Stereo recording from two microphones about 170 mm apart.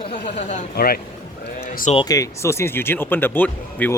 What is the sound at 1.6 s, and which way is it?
Sheep, 55° left (ahead or behind).